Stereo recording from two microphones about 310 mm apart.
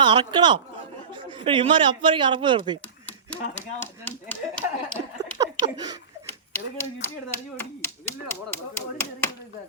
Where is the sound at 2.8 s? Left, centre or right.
Centre.